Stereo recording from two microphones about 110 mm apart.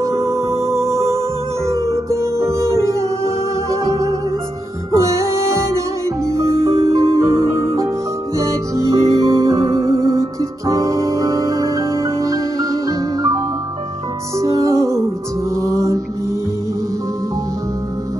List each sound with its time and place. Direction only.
0.0 s music: 30° right (ahead or behind)
14.4 s music: 30° right (ahead or behind)
15.5 s mantra: 30° right (ahead or behind)